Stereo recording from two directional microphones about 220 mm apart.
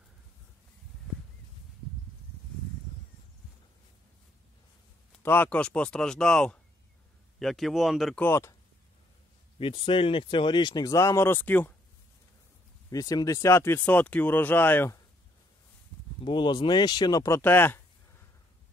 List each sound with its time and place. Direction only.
5.2 s speech: 10° left (ahead or behind)
8.3 s speech: 10° left (ahead or behind)
9.6 s speech: 25° left (ahead or behind); by 11.7 s 10° left (ahead or behind)
12.9 s speech: 15° left (ahead or behind)
16.3 s speech: 20° left (ahead or behind)